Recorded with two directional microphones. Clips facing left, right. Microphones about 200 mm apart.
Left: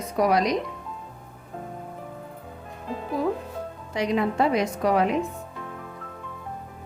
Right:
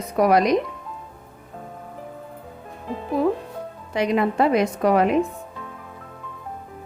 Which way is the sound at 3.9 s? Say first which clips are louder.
Right 3 dB; 60° right (ahead or behind).